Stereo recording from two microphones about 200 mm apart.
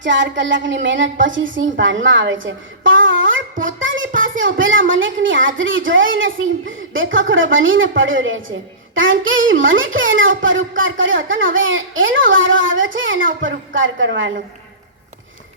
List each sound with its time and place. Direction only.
0.0 s speech: 65° right (ahead or behind)